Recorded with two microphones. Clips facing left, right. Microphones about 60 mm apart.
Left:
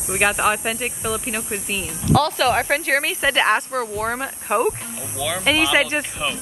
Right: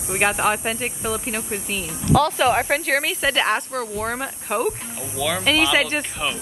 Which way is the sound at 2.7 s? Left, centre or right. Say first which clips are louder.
Left 1 dB; centre.